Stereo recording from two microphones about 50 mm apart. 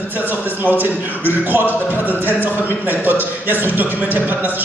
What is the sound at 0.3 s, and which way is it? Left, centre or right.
Speech, right.